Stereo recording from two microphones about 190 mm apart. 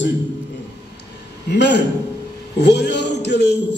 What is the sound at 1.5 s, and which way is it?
Music, 60° left (ahead or behind).